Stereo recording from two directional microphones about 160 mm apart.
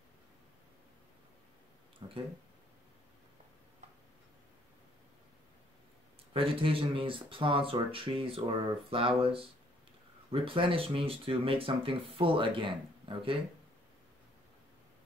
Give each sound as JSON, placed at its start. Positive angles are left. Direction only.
{"t": 2.0, "sound": "speech", "side_deg": -35}
{"t": 6.3, "sound": "speech", "side_deg": -35}